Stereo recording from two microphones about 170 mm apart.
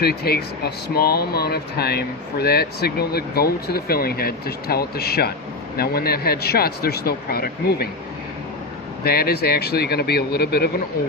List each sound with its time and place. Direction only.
0.0 s speech: 65° left (ahead or behind)
9.0 s speech: 65° left (ahead or behind)